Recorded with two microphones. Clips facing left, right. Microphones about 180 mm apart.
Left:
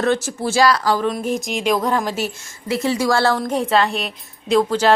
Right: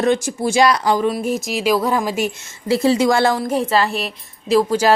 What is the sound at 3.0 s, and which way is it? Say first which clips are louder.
Speech: right 2 dB; 15° right (ahead or behind).